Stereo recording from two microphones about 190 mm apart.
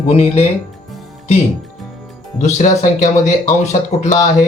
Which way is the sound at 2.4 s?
40° left (ahead or behind).